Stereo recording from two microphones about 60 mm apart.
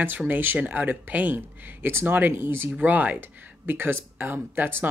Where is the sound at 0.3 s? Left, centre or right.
Right.